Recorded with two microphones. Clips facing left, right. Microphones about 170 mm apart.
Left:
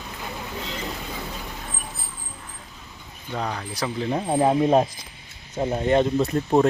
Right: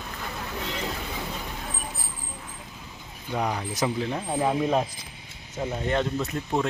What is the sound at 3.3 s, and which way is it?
Speech, 15° right (ahead or behind).